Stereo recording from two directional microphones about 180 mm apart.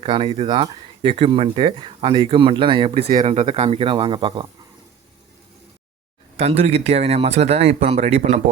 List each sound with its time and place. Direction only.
0.0 s speech: 30° right (ahead or behind)
2.9 s speech: 55° right (ahead or behind)
3.2 s speech: 35° right (ahead or behind)
6.3 s speech: 35° right (ahead or behind)